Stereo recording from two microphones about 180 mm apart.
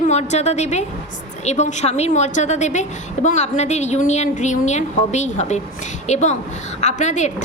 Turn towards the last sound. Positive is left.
turn(degrees=40)  # may be behind; listen again after turning